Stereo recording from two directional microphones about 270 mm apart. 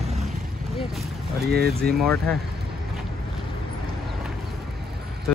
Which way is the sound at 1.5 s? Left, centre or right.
Right.